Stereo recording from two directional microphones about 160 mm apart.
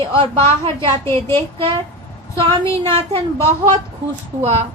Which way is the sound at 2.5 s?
35° right (ahead or behind).